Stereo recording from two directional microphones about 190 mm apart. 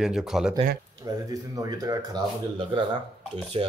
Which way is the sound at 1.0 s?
20° right (ahead or behind).